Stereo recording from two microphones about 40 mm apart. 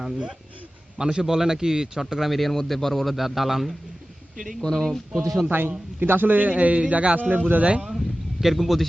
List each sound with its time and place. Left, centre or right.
0.9 s a man's voice: centre
2.3 s a man's voice: centre
4.6 s speech: centre
5.5 s a man's voice: right
6.5 s a man's voice: right
7.2 s a man's voice: right
7.9 s speech: centre